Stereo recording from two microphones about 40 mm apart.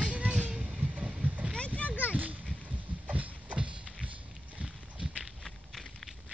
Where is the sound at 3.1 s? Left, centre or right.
Right.